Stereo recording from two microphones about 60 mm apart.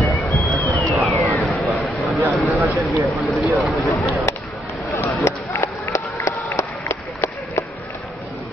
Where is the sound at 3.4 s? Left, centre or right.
Centre.